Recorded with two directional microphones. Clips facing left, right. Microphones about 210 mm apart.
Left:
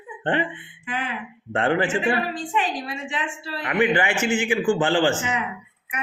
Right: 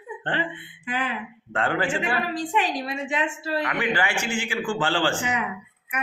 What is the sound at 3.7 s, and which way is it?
A man's voice, 20° left (ahead or behind).